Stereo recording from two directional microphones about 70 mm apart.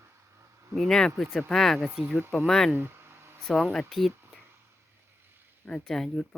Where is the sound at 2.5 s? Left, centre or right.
Centre.